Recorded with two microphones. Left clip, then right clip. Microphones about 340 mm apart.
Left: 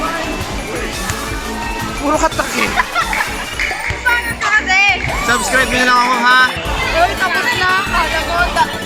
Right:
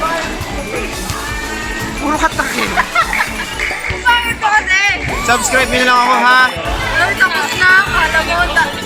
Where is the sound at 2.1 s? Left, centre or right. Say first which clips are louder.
Even; centre.